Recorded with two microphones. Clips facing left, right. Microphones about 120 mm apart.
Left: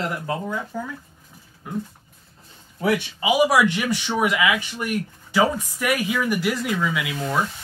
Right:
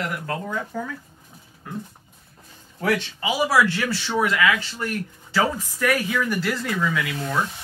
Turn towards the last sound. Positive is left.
turn(degrees=15)  # may be behind; listen again after turning